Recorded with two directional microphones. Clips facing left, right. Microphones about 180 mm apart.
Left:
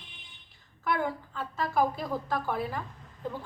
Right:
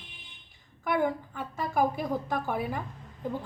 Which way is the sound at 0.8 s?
15° right (ahead or behind).